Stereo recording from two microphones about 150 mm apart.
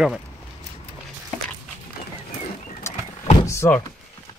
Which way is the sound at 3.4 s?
20° left (ahead or behind).